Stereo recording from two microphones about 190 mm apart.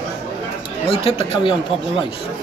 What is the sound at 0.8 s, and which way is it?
Speech, 30° left (ahead or behind).